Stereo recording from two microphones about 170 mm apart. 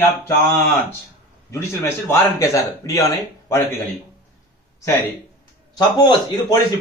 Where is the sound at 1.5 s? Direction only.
15° left (ahead or behind).